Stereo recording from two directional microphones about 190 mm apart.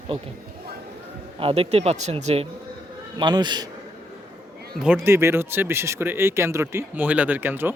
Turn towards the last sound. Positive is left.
turn(degrees=-10)  # may be behind; listen again after turning